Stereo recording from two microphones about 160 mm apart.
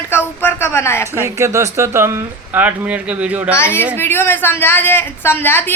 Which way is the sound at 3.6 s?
15° left (ahead or behind).